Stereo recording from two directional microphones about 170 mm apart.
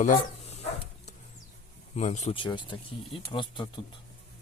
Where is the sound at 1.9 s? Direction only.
40° left (ahead or behind).